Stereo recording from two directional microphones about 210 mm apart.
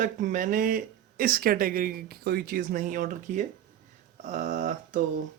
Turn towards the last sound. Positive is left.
turn(degrees=-35)  # may be behind; listen again after turning